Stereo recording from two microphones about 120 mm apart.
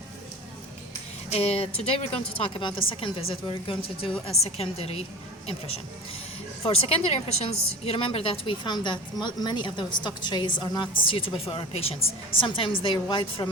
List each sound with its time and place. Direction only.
1.3 s a woman's voice: 55° left (ahead or behind)
4.3 s a woman's voice: 55° left (ahead or behind); by 13.5 s 40° left (ahead or behind)